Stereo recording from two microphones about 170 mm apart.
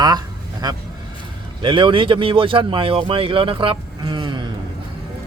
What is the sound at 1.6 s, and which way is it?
Speech, 30° right (ahead or behind).